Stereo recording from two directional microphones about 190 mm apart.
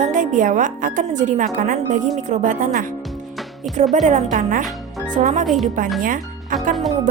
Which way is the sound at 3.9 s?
40° right (ahead or behind).